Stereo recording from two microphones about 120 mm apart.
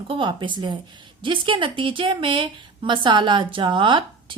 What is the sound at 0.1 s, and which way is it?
A woman's voice, 40° right (ahead or behind).